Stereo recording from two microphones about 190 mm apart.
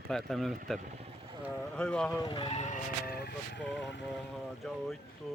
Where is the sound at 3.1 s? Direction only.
55° left (ahead or behind).